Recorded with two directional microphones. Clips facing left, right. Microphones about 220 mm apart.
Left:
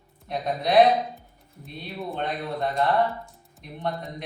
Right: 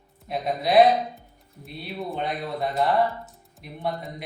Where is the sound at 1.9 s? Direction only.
Centre (ahead or behind).